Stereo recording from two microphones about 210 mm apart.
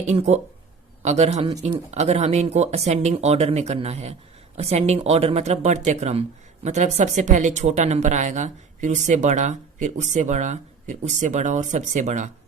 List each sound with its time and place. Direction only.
0.1 s speech: 30° right (ahead or behind)